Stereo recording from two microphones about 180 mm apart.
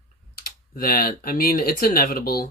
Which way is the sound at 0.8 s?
55° left (ahead or behind).